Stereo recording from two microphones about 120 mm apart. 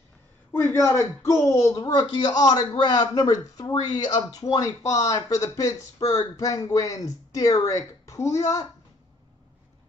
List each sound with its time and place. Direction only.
0.5 s speech: 20° left (ahead or behind)